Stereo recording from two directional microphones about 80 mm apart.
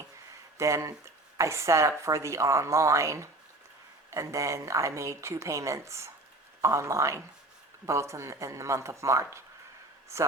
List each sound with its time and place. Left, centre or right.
0.5 s a woman's voice: right